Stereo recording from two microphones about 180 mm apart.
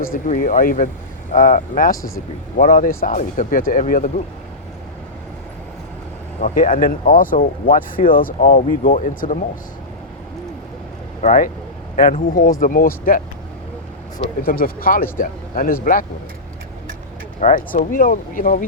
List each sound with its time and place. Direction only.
0.0 s speech: 50° left (ahead or behind)
2.0 s speech: 15° left (ahead or behind)
2.6 s speech: 50° left (ahead or behind)
6.4 s speech: 50° left (ahead or behind)
11.2 s speech: 45° left (ahead or behind)
14.4 s speech: 55° left (ahead or behind)
17.4 s speech: 45° left (ahead or behind)